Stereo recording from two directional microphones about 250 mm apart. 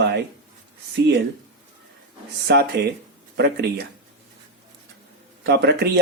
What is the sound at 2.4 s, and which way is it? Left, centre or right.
Speech, right.